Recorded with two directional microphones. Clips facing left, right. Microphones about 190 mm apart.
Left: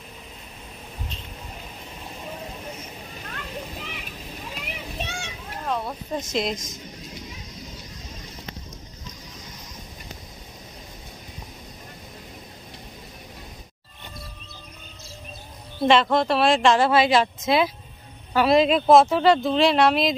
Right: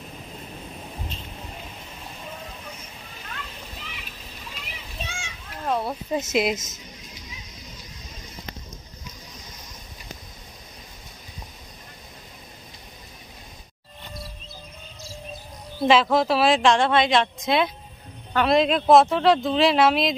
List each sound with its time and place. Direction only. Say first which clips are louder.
4.6 s a sound: left 5 dB; 60° left (ahead or behind)
5.7 s a woman's voice: right 3 dB; 5° right (ahead or behind)
15.8 s a woman's voice: even; centre (ahead or behind)